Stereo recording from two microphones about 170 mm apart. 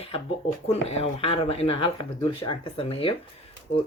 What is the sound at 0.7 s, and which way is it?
Speech, 35° left (ahead or behind).